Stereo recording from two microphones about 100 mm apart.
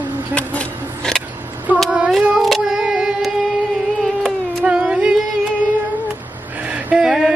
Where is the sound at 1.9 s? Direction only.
10° right (ahead or behind).